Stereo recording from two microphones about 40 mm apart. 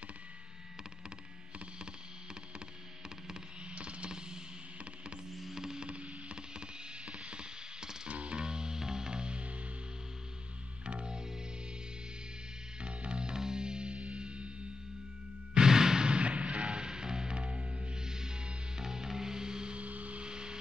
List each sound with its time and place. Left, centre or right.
3.7 s music: right
5.3 s music: centre
5.9 s a sound: right
7.1 s music: centre
8.1 s music: right
10.9 s music: right
12.8 s music: right
15.5 s music: centre
17.4 s music: right
19.8 s vehicle: right
20.2 s vehicle: right